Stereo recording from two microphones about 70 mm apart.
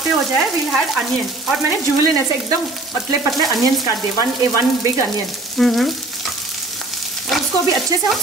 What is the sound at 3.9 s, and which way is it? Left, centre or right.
Frying, left.